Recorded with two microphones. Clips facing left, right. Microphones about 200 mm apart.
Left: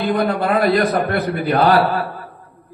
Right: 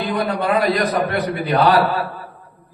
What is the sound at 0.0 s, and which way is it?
Speech, 40° left (ahead or behind).